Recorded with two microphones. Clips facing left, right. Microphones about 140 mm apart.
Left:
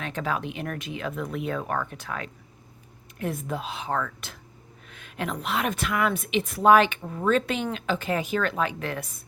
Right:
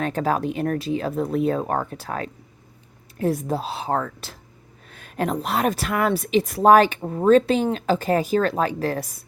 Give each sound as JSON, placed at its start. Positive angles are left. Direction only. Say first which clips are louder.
{"t": 0.0, "sound": "a woman's voice", "louder": "right 7 dB", "side_deg": -40}